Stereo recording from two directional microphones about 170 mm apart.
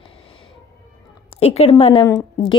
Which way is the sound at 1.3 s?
35° left (ahead or behind).